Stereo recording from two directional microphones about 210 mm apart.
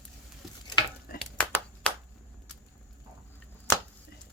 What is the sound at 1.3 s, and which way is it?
Clapping, 5° left (ahead or behind).